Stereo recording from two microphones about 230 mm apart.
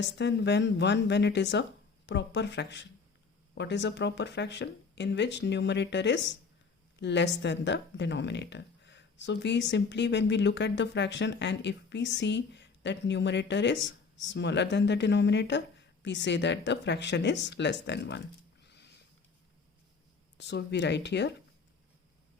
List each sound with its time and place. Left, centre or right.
0.0 s speech: left
18.6 s a sound: left
20.4 s speech: left